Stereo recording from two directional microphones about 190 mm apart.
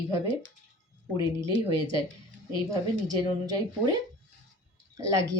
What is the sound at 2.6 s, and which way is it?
Speech, 20° right (ahead or behind).